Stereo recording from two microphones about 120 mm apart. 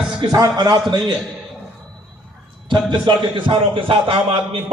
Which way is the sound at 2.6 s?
40° right (ahead or behind).